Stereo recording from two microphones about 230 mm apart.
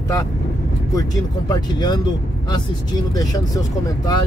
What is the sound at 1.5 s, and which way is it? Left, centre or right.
Speech, centre.